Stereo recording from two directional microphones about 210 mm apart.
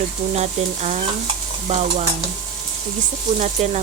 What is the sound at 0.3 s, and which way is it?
Frying, 35° right (ahead or behind).